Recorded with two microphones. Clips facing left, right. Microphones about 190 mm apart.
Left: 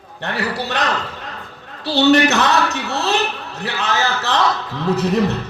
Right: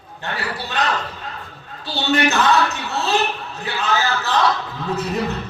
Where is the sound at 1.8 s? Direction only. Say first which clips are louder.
Left 6 dB; 75° left (ahead or behind).